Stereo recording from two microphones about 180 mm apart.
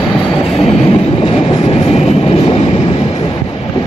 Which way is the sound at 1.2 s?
30° left (ahead or behind).